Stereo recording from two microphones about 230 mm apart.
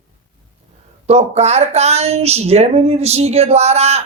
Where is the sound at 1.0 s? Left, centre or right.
Right.